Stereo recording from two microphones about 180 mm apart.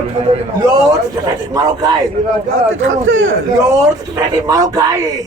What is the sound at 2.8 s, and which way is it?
Speech, 90° right.